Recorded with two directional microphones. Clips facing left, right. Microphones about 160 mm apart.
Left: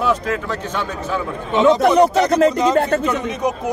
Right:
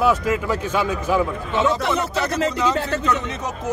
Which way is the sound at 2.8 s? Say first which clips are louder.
Left 7 dB; 60° left (ahead or behind).